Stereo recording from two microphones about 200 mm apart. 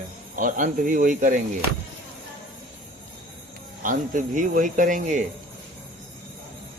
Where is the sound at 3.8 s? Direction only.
40° right (ahead or behind).